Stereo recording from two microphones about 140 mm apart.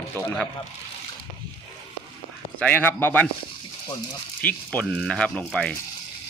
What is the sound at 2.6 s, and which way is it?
Speech, 10° left (ahead or behind).